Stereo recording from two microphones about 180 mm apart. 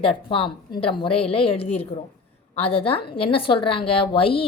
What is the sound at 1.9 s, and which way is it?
Speech, 45° left (ahead or behind).